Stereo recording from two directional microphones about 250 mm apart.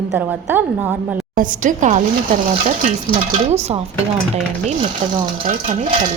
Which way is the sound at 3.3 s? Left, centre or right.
Right.